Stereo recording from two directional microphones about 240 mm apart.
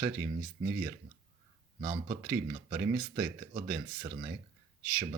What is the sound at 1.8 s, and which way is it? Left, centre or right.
Speech, right.